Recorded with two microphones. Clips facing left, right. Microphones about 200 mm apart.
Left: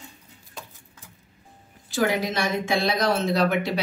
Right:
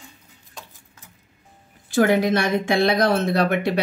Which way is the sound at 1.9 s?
55° right (ahead or behind).